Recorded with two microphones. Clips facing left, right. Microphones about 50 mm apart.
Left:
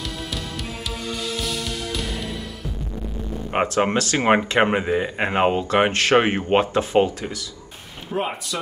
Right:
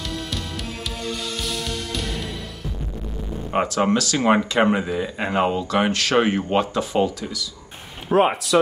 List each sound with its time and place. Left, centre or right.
1.4 s music: centre
3.5 s speech: left
8.1 s speech: right